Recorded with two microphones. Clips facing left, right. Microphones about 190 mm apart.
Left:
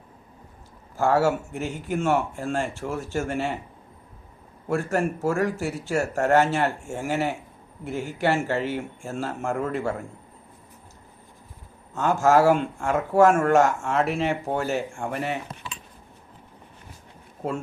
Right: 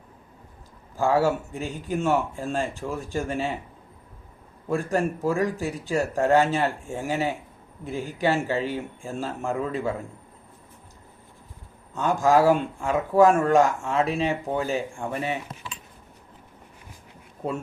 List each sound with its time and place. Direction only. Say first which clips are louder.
0.9 s speech: left 1 dB; 15° right (ahead or behind)
4.7 s speech: even; 15° right (ahead or behind)
11.9 s speech: left 1 dB; 15° right (ahead or behind)